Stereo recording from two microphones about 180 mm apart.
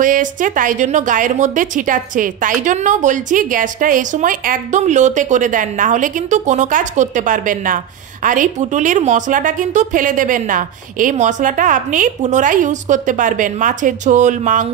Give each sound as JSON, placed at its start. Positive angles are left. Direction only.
{"t": 0.0, "sound": "a woman's voice", "side_deg": -45}